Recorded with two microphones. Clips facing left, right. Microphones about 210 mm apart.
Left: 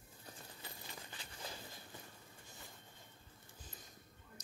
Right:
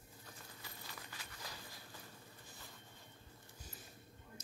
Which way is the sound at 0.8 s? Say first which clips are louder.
Left 1 dB; 25° left (ahead or behind).